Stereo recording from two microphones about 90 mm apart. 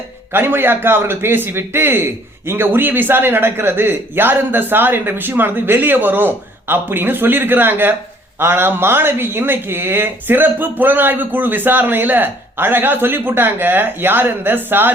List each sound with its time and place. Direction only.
0.3 s speech: 25° right (ahead or behind)